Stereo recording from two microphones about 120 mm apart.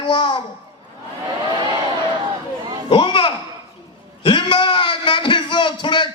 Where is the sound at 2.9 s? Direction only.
40° left (ahead or behind).